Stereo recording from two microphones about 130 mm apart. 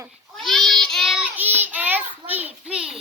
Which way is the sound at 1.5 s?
15° right (ahead or behind).